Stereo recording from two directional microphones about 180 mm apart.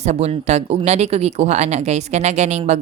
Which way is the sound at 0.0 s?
35° right (ahead or behind).